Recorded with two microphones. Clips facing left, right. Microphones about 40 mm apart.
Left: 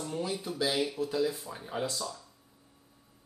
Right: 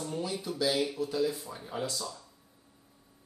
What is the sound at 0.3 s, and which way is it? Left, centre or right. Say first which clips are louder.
A man's voice: right 2 dB; left.